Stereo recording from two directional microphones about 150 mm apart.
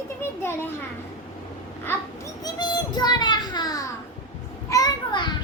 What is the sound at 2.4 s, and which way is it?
A child's voice, 30° left (ahead or behind).